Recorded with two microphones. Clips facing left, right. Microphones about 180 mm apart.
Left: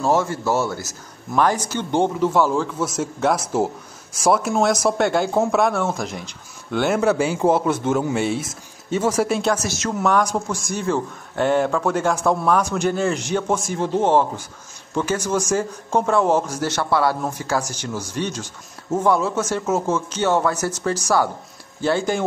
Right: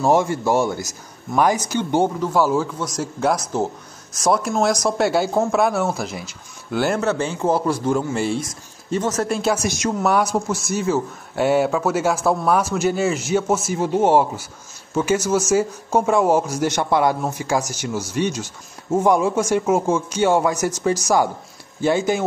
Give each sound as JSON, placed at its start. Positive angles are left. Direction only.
{"t": 0.0, "sound": "a man's voice", "side_deg": -15}
{"t": 7.0, "sound": "a man's voice", "side_deg": 10}
{"t": 9.4, "sound": "a man's voice", "side_deg": -10}